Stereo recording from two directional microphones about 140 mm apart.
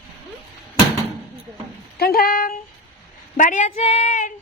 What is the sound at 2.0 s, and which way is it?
Speech, 90° left.